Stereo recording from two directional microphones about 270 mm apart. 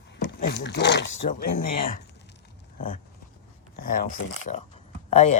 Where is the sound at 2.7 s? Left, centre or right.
Left.